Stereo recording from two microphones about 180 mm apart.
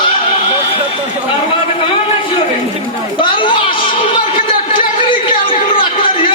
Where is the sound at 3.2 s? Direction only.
30° left (ahead or behind).